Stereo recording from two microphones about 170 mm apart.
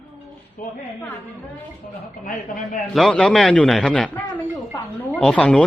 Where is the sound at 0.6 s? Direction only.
55° left (ahead or behind).